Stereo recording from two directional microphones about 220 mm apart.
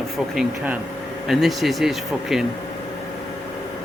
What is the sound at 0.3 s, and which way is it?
Speech, 5° right (ahead or behind).